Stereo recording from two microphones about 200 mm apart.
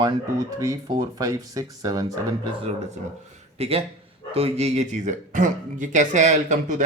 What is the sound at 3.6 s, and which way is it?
A man's voice, 30° right (ahead or behind).